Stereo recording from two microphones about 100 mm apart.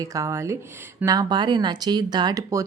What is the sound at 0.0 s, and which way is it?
Speech, 35° right (ahead or behind).